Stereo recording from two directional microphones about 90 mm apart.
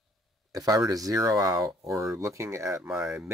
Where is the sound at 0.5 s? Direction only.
45° right (ahead or behind).